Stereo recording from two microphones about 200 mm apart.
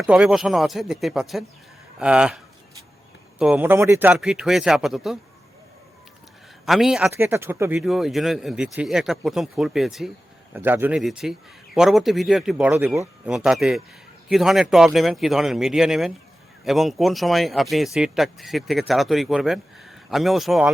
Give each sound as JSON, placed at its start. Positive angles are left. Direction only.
{"t": 0.0, "sound": "speech", "side_deg": -5}
{"t": 6.7, "sound": "speech", "side_deg": 0}
{"t": 7.8, "sound": "speech", "side_deg": 0}